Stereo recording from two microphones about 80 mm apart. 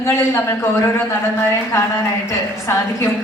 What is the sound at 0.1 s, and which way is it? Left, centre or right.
Speech, left.